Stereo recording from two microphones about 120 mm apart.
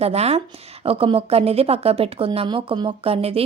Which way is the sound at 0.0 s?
60° right (ahead or behind).